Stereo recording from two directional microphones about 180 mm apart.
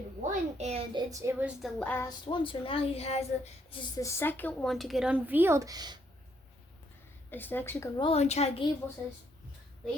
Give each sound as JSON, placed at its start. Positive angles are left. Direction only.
{"t": 0.2, "sound": "a woman's voice", "side_deg": -40}
{"t": 1.1, "sound": "a woman's voice", "side_deg": -15}
{"t": 1.8, "sound": "speech", "side_deg": 10}
{"t": 2.0, "sound": "a child's voice", "side_deg": 25}
{"t": 4.0, "sound": "speech", "side_deg": 15}
{"t": 7.3, "sound": "speech", "side_deg": 10}
{"t": 7.9, "sound": "a child's voice", "side_deg": 30}